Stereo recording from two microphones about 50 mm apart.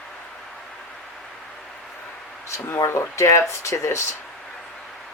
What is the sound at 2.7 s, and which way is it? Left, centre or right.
Speech, left.